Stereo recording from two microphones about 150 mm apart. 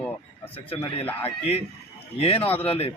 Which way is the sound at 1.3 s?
40° left (ahead or behind).